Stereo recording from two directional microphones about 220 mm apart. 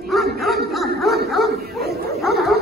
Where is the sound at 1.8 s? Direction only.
45° right (ahead or behind).